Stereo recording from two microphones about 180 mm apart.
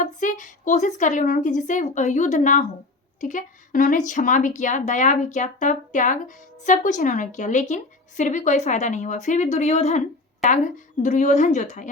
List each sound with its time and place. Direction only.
0.0 s a woman's voice: 45° left (ahead or behind)
11.0 s a woman's voice: 40° left (ahead or behind)